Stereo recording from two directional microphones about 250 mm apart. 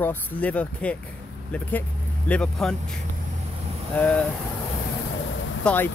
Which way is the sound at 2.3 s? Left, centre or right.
Centre.